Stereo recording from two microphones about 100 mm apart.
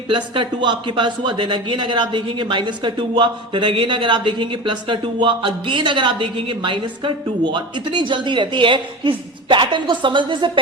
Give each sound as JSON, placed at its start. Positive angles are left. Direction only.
{"t": 0.1, "sound": "speech", "side_deg": -50}